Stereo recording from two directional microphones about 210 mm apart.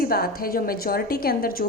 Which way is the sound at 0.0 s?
45° left (ahead or behind).